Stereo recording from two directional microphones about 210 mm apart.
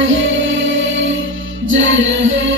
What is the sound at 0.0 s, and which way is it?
Music, 65° right (ahead or behind).